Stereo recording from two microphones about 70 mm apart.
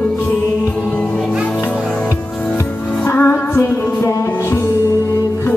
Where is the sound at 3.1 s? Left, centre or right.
Left.